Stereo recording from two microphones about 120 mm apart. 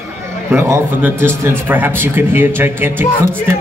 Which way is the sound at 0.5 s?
25° right (ahead or behind).